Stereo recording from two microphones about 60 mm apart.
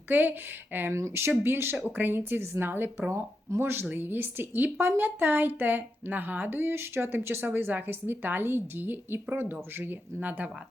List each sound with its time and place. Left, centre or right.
0.1 s a woman's voice: right
0.9 s speech: right
1.3 s a woman's voice: right